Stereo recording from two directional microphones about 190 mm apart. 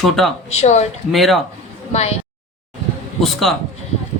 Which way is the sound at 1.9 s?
35° left (ahead or behind).